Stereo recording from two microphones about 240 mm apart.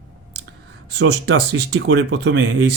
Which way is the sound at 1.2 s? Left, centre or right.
Right.